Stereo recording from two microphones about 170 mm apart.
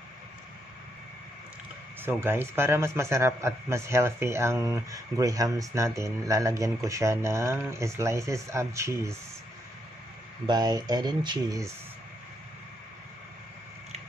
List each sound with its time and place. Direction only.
2.0 s a man's voice: 15° right (ahead or behind)
10.4 s speech: 25° right (ahead or behind)